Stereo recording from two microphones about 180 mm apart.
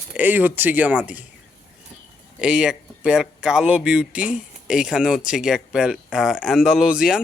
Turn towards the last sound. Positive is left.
turn(degrees=-5)  # may be behind; listen again after turning